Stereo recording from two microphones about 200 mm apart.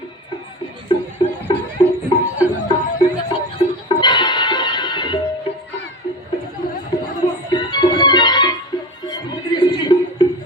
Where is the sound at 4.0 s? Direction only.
20° left (ahead or behind).